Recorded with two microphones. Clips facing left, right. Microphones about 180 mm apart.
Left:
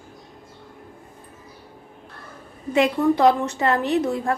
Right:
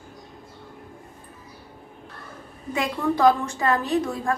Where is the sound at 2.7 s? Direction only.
25° left (ahead or behind).